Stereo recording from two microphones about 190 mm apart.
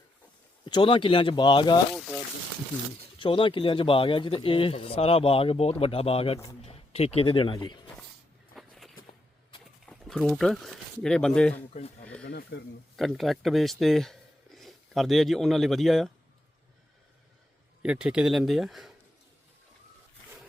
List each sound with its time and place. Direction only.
0.6 s speech: 25° left (ahead or behind)
1.9 s speech: centre (ahead or behind)
3.2 s speech: 25° left (ahead or behind)
8.5 s walk: centre (ahead or behind)
9.8 s speech: centre (ahead or behind)
12.2 s speech: 60° left (ahead or behind)
13.0 s speech: centre (ahead or behind)
17.8 s speech: 5° right (ahead or behind)